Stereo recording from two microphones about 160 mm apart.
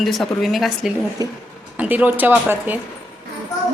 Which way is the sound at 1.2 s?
25° right (ahead or behind).